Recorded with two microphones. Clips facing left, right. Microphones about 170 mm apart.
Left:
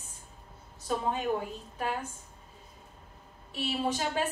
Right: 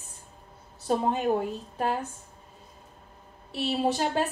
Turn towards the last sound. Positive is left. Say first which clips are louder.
# right 5 dB
turn(degrees=-35)  # may be behind; listen again after turning